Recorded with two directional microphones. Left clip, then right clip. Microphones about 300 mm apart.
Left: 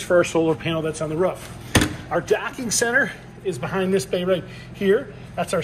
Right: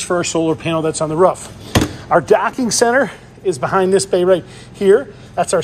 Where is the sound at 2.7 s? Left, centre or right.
Centre.